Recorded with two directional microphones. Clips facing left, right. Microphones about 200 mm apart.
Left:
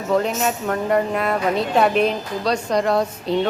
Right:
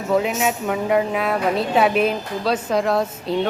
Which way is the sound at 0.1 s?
5° right (ahead or behind).